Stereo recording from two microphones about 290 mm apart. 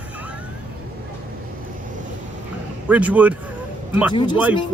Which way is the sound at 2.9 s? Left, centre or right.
Centre.